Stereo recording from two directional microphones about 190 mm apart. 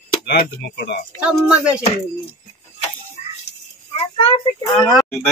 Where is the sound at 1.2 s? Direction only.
5° right (ahead or behind).